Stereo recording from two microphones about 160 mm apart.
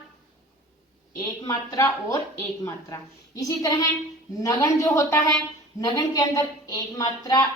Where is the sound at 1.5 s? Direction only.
20° left (ahead or behind).